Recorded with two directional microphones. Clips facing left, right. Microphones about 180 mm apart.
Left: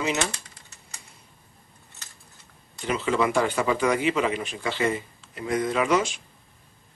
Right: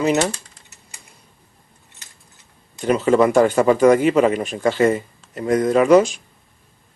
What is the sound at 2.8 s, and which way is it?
A man's voice, 45° right (ahead or behind).